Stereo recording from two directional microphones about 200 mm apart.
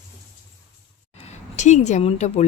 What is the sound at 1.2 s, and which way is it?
A woman's voice, 35° left (ahead or behind).